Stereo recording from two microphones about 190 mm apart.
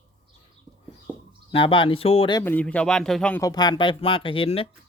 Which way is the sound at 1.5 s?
25° left (ahead or behind).